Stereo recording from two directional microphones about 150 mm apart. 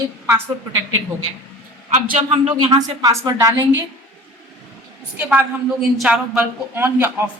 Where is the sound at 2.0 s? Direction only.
55° right (ahead or behind).